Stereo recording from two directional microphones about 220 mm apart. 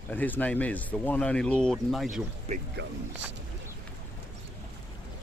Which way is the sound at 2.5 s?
30° right (ahead or behind).